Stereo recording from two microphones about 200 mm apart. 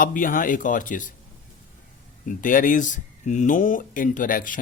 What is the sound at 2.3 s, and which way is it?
Speech, 40° left (ahead or behind).